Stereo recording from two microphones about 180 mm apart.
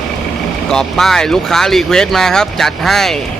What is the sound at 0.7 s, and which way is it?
Speech, centre (ahead or behind).